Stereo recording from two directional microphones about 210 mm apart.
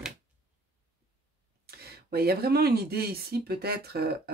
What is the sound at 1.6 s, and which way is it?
Speech, 50° right (ahead or behind).